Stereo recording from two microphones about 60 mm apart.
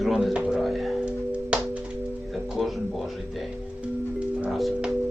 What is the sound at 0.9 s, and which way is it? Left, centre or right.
Music, centre.